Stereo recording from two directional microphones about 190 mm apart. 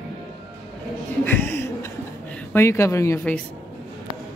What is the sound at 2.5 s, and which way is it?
Speech, 15° left (ahead or behind).